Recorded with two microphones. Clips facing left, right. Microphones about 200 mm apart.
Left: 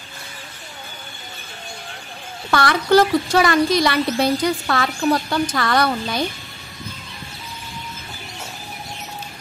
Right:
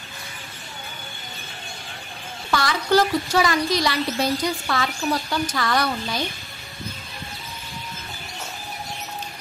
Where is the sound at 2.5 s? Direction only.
60° left (ahead or behind).